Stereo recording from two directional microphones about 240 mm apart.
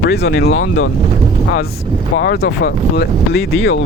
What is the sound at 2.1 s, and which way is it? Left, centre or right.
Speech, left.